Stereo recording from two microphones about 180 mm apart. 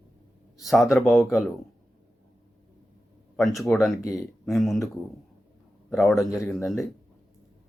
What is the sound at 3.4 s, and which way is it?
Speech, centre (ahead or behind).